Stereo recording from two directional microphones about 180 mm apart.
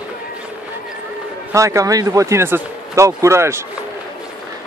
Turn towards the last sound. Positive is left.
turn(degrees=-15)  # may be behind; listen again after turning